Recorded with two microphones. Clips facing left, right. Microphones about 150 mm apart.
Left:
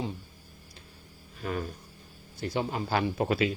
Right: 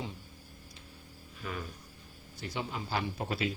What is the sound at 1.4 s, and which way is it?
A man's voice, 45° left (ahead or behind).